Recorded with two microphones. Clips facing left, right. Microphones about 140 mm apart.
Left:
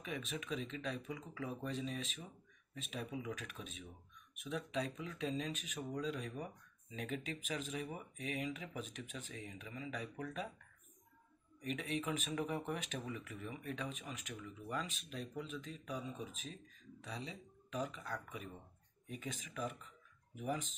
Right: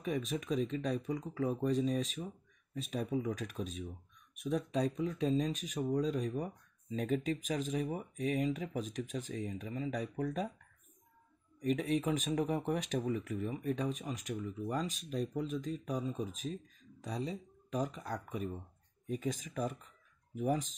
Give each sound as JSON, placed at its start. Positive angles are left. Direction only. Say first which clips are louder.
{"t": 0.0, "sound": "speech", "louder": "right 8 dB", "side_deg": -40}
{"t": 11.6, "sound": "speech", "louder": "right 8 dB", "side_deg": -40}